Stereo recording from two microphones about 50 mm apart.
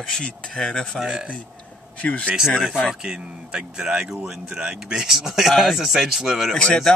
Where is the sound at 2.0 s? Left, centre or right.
Left.